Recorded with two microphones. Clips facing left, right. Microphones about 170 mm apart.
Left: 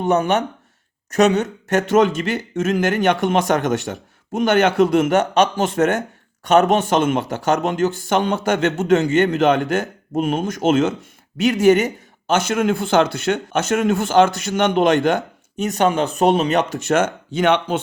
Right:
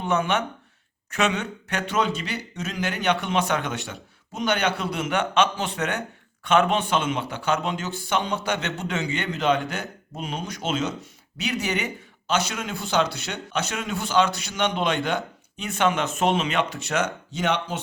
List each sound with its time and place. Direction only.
0.0 s speech: 40° left (ahead or behind); by 17.7 s 60° left (ahead or behind)